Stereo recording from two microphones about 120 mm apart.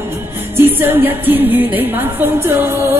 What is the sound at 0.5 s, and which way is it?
A woman's voice, 20° right (ahead or behind).